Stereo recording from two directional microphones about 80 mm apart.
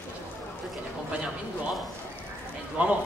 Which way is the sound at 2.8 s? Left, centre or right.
Centre.